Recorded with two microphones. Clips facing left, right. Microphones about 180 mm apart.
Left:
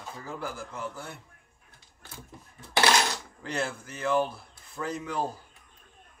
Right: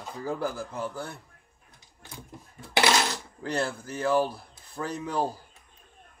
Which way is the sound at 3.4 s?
35° right (ahead or behind).